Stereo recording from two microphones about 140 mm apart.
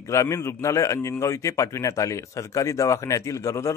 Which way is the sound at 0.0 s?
20° left (ahead or behind).